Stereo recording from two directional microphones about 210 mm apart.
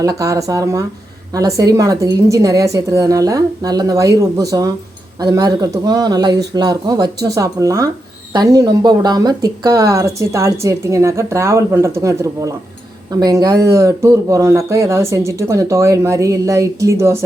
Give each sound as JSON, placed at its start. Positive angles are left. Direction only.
{"t": 0.0, "sound": "speech", "side_deg": -15}